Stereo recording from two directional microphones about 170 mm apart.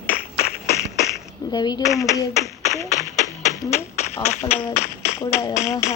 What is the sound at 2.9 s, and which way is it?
Music, 45° left (ahead or behind).